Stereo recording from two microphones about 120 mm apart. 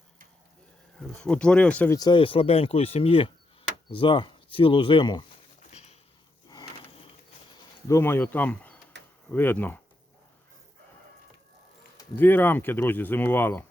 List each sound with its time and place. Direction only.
0.9 s speech: 10° left (ahead or behind)
1.9 s speech: 30° left (ahead or behind)
2.1 s speech: 50° left (ahead or behind)
5.7 s a sound: 65° left (ahead or behind)
7.9 s speech: 20° left (ahead or behind)
12.1 s speech: 15° left (ahead or behind)